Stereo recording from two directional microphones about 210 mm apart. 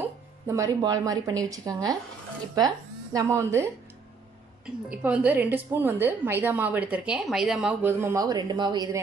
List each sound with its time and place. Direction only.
0.5 s a woman's voice: 15° right (ahead or behind)